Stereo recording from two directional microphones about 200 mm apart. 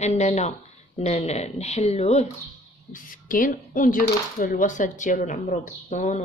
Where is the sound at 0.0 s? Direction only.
30° left (ahead or behind).